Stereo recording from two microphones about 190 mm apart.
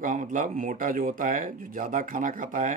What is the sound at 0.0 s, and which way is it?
Speech, 45° right (ahead or behind).